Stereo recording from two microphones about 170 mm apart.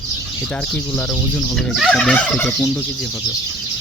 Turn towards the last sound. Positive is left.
turn(degrees=5)  # may be behind; listen again after turning